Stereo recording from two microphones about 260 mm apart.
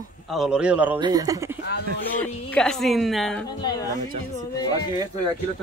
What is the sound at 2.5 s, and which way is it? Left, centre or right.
Speech, centre.